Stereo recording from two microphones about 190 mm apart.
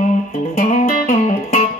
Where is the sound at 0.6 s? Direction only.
40° left (ahead or behind).